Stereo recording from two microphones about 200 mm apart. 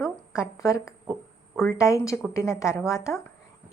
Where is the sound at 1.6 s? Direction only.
15° left (ahead or behind).